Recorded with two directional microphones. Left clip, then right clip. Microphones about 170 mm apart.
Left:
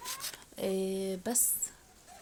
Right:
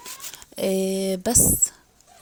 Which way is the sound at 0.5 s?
40° right (ahead or behind).